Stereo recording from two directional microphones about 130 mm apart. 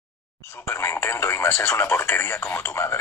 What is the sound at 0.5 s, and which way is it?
Speech, 20° left (ahead or behind).